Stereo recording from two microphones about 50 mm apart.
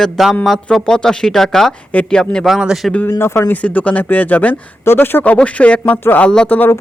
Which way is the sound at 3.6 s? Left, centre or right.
Left.